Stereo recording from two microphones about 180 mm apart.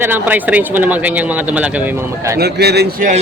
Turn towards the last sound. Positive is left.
turn(degrees=-65)  # may be behind; listen again after turning